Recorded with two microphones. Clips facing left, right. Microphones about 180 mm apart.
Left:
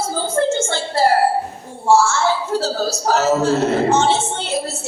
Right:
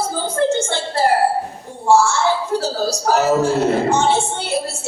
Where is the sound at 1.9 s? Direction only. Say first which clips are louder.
Even; 15° right (ahead or behind).